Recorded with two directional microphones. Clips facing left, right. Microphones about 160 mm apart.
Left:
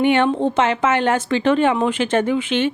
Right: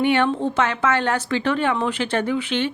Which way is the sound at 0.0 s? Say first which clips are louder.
Left 3 dB; 20° left (ahead or behind).